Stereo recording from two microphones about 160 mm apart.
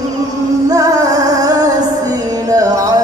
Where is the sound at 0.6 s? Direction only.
25° right (ahead or behind).